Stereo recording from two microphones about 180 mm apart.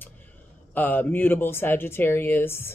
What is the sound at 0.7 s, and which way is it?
Speech, 10° left (ahead or behind).